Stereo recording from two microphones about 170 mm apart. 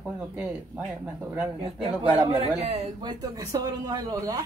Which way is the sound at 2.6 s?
35° right (ahead or behind).